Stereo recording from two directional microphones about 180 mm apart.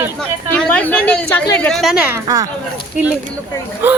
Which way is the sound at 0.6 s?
10° left (ahead or behind).